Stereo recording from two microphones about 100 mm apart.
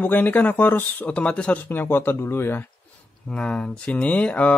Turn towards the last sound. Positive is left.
turn(degrees=15)  # may be behind; listen again after turning